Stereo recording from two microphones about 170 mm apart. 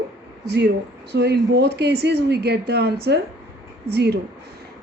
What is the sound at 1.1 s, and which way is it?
A woman's voice, 85° right.